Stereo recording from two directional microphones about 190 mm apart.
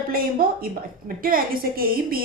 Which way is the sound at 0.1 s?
50° right (ahead or behind).